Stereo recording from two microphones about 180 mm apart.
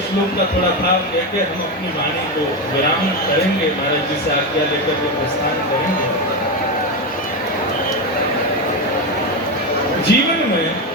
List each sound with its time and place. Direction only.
10.1 s a man's voice: 65° left (ahead or behind)